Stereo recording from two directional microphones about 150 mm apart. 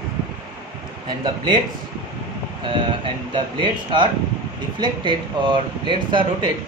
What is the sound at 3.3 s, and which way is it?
Speech, 30° right (ahead or behind).